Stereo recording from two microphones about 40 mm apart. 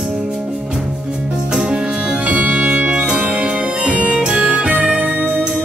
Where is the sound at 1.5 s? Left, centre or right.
Centre.